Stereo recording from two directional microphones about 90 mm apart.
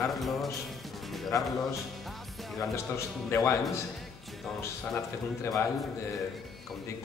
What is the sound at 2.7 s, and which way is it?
Speech, 30° left (ahead or behind).